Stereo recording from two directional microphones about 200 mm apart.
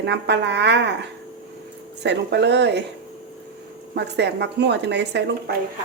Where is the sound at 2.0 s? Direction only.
60° right (ahead or behind).